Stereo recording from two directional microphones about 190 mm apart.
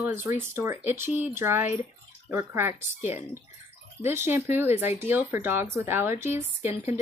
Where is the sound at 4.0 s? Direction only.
10° right (ahead or behind).